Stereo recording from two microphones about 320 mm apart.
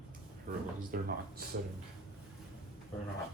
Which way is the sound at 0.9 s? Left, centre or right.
Right.